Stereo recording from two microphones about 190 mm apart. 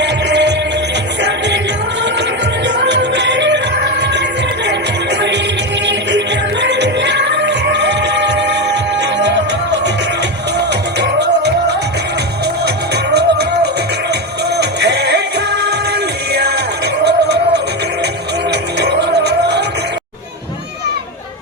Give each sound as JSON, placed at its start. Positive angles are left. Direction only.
{"t": 0.0, "sound": "music", "side_deg": -65}
{"t": 2.6, "sound": "music", "side_deg": -65}
{"t": 5.8, "sound": "music", "side_deg": -65}
{"t": 12.6, "sound": "music", "side_deg": -60}
{"t": 18.8, "sound": "music", "side_deg": -60}